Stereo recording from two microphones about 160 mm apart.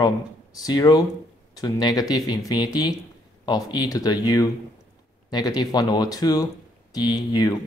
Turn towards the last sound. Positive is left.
turn(degrees=25)  # may be behind; listen again after turning